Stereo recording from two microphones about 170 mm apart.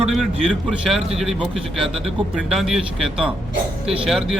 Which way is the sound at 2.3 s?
Centre (ahead or behind).